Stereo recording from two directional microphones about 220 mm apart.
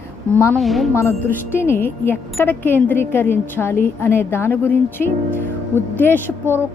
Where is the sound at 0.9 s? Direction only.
10° left (ahead or behind).